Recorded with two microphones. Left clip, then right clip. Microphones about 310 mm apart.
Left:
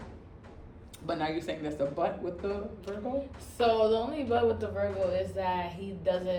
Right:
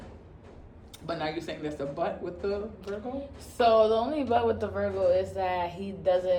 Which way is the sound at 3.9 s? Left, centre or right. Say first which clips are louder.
Right 3 dB; right.